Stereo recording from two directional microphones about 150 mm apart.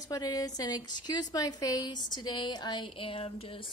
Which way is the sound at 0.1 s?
25° left (ahead or behind).